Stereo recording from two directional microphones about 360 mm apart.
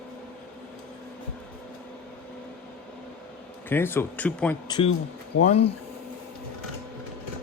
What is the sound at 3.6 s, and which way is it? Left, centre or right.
Speech, centre.